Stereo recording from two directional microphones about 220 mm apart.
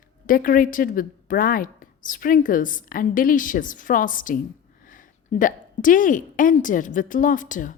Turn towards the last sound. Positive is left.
turn(degrees=35)  # may be behind; listen again after turning